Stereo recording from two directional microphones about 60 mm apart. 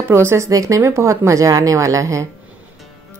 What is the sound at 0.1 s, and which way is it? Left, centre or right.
Speech, right.